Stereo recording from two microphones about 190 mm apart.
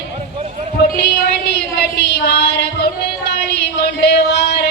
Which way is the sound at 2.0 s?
60° left (ahead or behind).